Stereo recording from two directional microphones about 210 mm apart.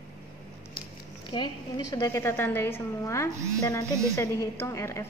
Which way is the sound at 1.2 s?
20° left (ahead or behind).